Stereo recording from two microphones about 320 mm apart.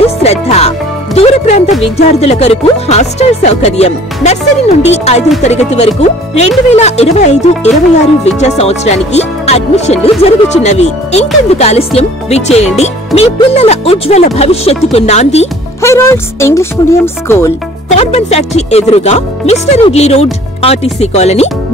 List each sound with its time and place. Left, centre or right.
0.0 s speech: centre
15.8 s speech: centre
17.8 s speech: centre